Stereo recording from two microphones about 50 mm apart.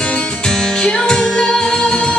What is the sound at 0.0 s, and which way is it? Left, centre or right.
Music, centre.